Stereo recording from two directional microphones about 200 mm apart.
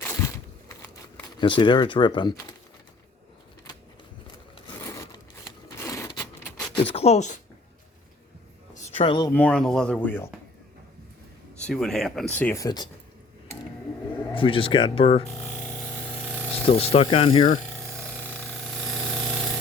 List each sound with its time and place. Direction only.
0.0 s crumpling: 10° left (ahead or behind)
1.4 s speech: 25° left (ahead or behind)
4.5 s a sound: 20° left (ahead or behind)
6.9 s speech: 30° left (ahead or behind)
8.7 s a sound: 35° left (ahead or behind)
9.3 s speech: 5° left (ahead or behind)
11.6 s speech: 5° left (ahead or behind)
12.6 s speech: 20° left (ahead or behind)
14.3 s speech: 25° left (ahead or behind)
15.3 s a sound: 5° left (ahead or behind)
16.7 s speech: 30° left (ahead or behind)
17.7 s a sound: 5° left (ahead or behind)
19.1 s jackhammer: centre (ahead or behind)